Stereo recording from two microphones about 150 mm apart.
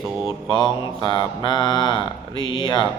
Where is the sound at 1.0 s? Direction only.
30° left (ahead or behind).